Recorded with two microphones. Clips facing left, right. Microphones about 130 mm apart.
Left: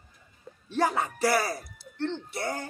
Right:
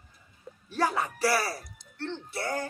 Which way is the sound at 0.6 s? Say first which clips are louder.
Left 2 dB; 25° left (ahead or behind).